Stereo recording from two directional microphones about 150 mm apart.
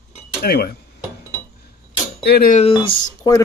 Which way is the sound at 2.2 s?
85° left.